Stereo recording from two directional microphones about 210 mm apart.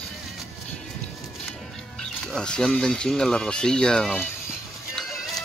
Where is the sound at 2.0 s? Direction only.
5° left (ahead or behind).